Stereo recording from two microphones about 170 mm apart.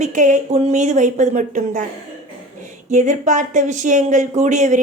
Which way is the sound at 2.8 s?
45° right (ahead or behind).